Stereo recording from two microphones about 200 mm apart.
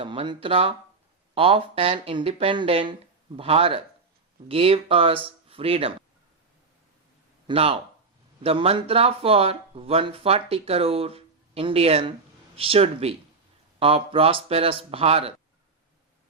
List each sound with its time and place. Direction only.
0.0 s speech: 25° right (ahead or behind)
7.4 s speech: 30° right (ahead or behind)